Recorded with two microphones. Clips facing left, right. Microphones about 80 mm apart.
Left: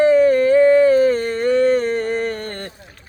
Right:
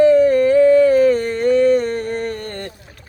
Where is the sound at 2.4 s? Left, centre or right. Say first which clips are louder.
Right 1 dB; left.